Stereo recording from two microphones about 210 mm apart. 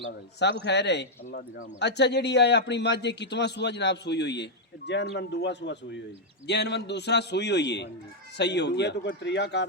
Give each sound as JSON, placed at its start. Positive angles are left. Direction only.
{"t": 0.3, "sound": "a man's voice", "side_deg": 55}